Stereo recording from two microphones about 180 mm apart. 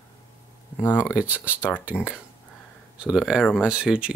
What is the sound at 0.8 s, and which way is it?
Speech, 15° left (ahead or behind).